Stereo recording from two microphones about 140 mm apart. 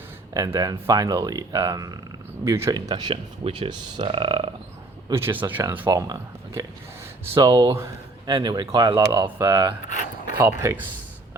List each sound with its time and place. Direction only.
0.3 s speech: 25° right (ahead or behind)
5.0 s speech: 20° right (ahead or behind)